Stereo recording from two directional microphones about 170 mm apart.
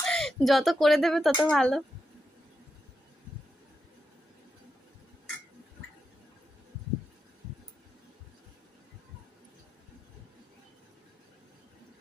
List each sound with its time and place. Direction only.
0.0 s speech: centre (ahead or behind)